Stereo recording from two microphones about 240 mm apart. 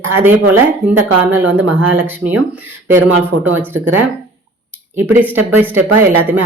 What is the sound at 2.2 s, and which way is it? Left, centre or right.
Speech, right.